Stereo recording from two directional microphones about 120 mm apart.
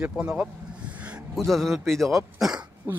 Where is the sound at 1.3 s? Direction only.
Centre (ahead or behind).